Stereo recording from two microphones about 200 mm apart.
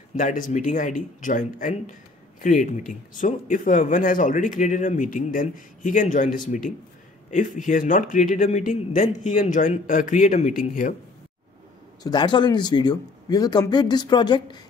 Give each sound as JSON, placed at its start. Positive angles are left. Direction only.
{"t": 0.1, "sound": "speech", "side_deg": 40}
{"t": 12.0, "sound": "speech", "side_deg": 20}